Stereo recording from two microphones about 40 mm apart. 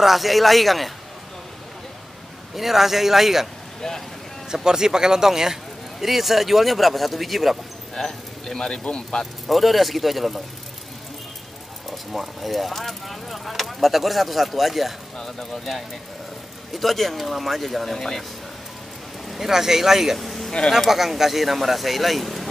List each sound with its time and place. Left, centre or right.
0.0 s speech: centre
2.5 s a man's voice: centre
4.6 s speech: centre
7.9 s speech: centre
9.2 s speech: centre
12.1 s speech: centre
15.1 s speech: centre
19.2 s speech: centre